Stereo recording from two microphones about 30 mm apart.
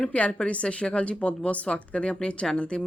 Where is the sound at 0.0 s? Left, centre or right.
Left.